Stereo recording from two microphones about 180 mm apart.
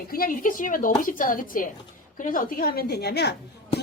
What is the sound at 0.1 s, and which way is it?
A woman's voice, 50° left (ahead or behind).